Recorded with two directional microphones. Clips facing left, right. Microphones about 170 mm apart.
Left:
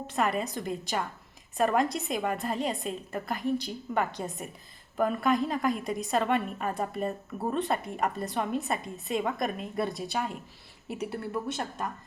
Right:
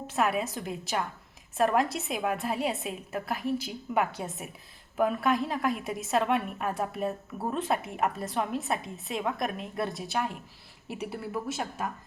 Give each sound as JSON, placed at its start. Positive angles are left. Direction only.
{"t": 0.1, "sound": "a woman's voice", "side_deg": -5}